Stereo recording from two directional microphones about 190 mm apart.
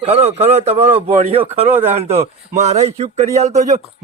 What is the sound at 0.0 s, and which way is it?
Speech, 35° right (ahead or behind).